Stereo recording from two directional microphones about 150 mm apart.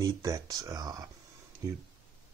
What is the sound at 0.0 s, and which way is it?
Speech, 20° right (ahead or behind).